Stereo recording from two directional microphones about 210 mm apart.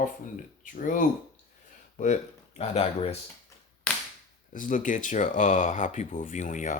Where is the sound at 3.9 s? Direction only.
5° left (ahead or behind).